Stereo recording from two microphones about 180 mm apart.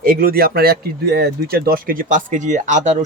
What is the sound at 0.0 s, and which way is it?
Speech, 55° right (ahead or behind).